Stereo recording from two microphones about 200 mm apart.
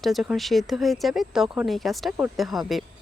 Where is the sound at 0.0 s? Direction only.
Centre (ahead or behind).